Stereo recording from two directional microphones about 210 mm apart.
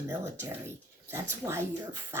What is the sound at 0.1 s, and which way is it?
Speech, 10° right (ahead or behind).